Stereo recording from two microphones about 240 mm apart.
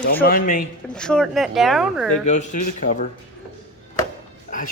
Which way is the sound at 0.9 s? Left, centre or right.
Centre.